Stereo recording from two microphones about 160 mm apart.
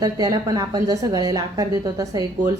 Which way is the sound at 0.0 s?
25° right (ahead or behind).